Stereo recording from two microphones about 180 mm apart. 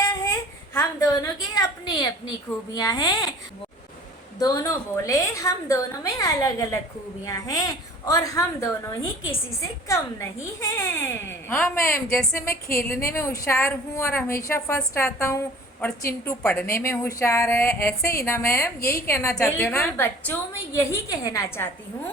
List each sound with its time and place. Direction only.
0.0 s a sound: 15° left (ahead or behind)
2.7 s a woman's voice: 20° left (ahead or behind)
4.4 s a woman's voice: 20° left (ahead or behind)